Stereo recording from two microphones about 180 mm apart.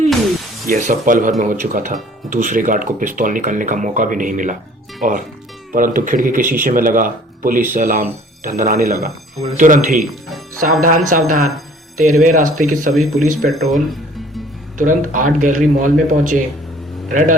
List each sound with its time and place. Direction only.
0.7 s speech: 45° right (ahead or behind)
12.9 s speech: centre (ahead or behind)
14.8 s speech: 45° right (ahead or behind)